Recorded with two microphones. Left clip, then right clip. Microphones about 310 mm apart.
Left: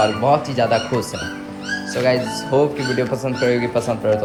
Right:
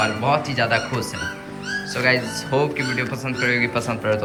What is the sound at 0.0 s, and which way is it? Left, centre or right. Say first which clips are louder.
Speech: left 4 dB; centre.